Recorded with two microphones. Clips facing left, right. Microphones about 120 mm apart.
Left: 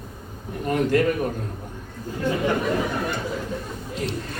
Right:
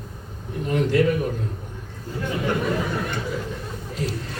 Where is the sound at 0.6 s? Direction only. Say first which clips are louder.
Even; 50° left (ahead or behind).